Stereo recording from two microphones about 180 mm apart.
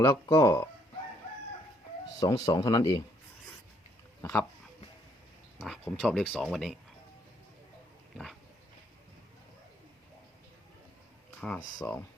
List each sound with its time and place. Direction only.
0.0 s speech: 30° left (ahead or behind)
0.4 s speech: 15° left (ahead or behind)
2.2 s speech: 20° left (ahead or behind)
4.2 s speech: 10° left (ahead or behind)
5.6 s speech: centre (ahead or behind)
11.3 s speech: 5° left (ahead or behind)